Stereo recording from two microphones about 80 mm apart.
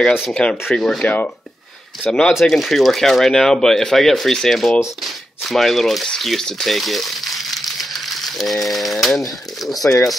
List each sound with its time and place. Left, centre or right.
0.3 s speech: centre
1.0 s speech: centre
2.0 s speech: centre